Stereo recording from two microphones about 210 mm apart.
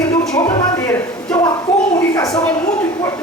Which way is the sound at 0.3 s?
10° left (ahead or behind).